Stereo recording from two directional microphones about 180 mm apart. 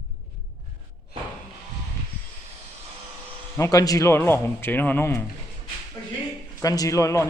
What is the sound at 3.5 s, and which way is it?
A man's voice, 20° left (ahead or behind).